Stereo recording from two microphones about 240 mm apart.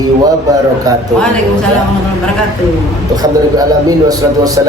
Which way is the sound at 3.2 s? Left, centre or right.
Centre.